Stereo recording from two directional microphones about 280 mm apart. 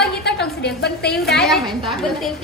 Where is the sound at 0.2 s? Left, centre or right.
Left.